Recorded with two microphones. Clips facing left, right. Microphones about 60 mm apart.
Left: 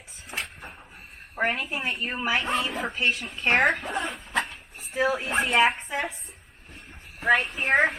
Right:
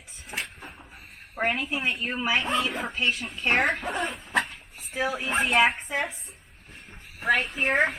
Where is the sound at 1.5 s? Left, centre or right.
Left.